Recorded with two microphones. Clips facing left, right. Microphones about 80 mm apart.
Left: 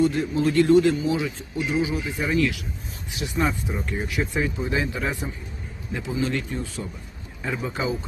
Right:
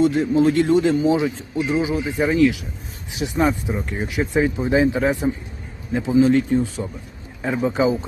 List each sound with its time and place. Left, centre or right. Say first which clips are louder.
0.0 s a man's voice: right 5 dB; right